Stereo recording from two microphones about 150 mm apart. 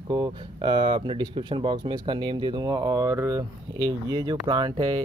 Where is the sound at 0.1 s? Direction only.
30° right (ahead or behind).